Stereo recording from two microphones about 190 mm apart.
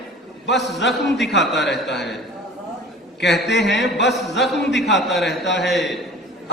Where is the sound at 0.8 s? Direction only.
65° left (ahead or behind).